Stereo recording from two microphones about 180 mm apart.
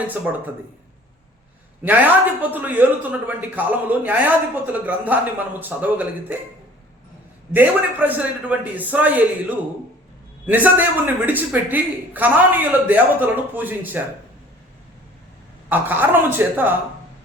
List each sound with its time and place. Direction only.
1.8 s a man's voice: 10° right (ahead or behind)
7.5 s a man's voice: 10° right (ahead or behind)
10.4 s a man's voice: 10° right (ahead or behind)
15.7 s a man's voice: 10° right (ahead or behind)